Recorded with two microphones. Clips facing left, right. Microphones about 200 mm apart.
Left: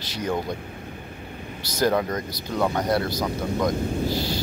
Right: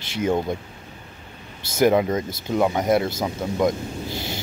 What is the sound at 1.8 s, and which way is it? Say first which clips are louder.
Speech: right 4 dB; 20° right (ahead or behind).